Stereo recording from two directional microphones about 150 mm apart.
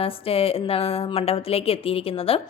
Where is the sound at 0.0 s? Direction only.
40° left (ahead or behind).